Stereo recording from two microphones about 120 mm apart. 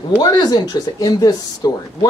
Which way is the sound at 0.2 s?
35° left (ahead or behind).